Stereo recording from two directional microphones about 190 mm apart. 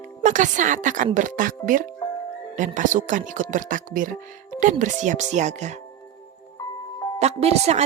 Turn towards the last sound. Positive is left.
turn(degrees=-35)  # may be behind; listen again after turning